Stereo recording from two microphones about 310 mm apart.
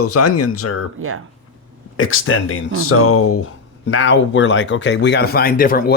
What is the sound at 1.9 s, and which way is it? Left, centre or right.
Speech, left.